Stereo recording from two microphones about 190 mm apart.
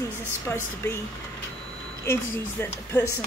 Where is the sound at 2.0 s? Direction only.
10° left (ahead or behind).